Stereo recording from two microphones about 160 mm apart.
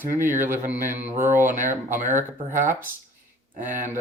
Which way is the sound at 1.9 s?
50° right (ahead or behind).